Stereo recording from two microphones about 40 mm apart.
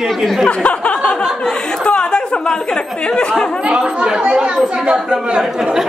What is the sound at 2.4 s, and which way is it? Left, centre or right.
Speech, left.